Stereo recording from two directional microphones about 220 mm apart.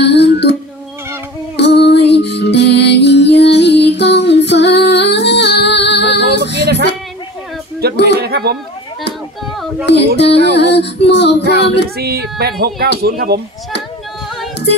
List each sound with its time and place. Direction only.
0.0 s music: 50° left (ahead or behind)
1.6 s music: 50° left (ahead or behind)
6.4 s female singing: 50° left (ahead or behind)
8.0 s a sound: 45° right (ahead or behind)
10.1 s music: 50° left (ahead or behind)
12.0 s speech: 45° right (ahead or behind)